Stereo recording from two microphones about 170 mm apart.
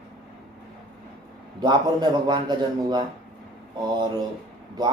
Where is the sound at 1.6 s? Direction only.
25° right (ahead or behind).